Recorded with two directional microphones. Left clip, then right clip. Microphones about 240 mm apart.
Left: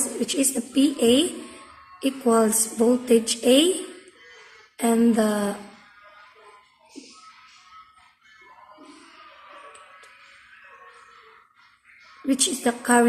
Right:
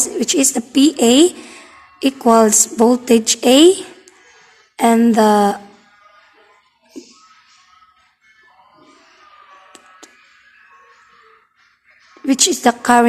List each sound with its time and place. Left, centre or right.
0.2 s a woman's voice: right
4.8 s a woman's voice: right
12.3 s a woman's voice: right